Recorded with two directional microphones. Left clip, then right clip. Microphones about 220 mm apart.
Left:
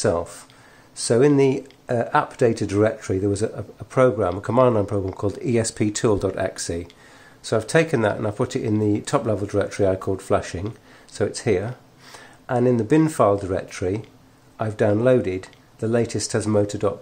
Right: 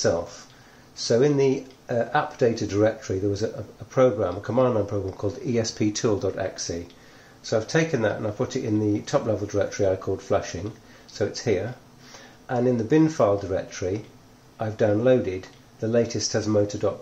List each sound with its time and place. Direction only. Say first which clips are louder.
0.9 s speech: left 3 dB; 45° left (ahead or behind)